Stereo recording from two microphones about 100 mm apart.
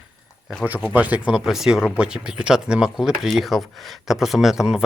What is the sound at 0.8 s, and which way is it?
Speech, 15° right (ahead or behind).